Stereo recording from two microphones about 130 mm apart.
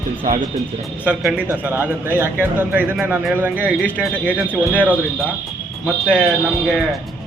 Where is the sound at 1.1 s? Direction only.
10° right (ahead or behind).